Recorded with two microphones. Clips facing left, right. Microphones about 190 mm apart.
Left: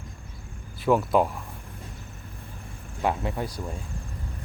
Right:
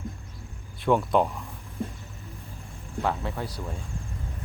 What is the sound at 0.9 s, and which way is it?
Speech, 5° left (ahead or behind).